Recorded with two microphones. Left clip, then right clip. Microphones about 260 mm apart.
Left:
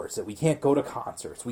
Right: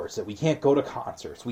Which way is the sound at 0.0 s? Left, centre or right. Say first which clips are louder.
Even; left.